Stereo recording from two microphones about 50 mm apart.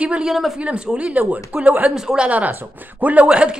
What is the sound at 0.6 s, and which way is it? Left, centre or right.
Speech, right.